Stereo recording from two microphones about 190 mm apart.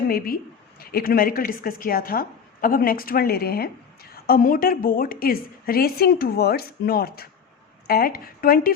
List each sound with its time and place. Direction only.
0.8 s a woman's voice: 50° left (ahead or behind)